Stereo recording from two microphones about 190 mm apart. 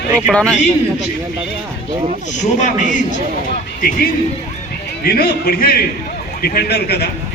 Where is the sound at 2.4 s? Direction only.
40° left (ahead or behind).